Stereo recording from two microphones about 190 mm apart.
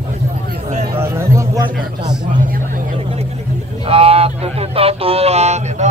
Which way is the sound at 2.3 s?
45° right (ahead or behind).